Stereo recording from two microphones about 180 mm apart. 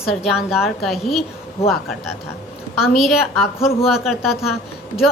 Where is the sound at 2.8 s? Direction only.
Centre (ahead or behind).